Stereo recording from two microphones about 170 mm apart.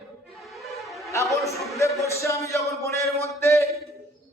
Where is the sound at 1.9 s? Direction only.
15° left (ahead or behind).